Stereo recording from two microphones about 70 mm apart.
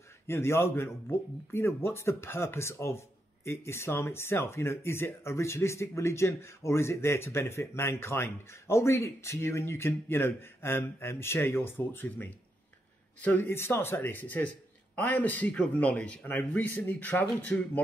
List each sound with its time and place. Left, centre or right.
0.3 s speech: left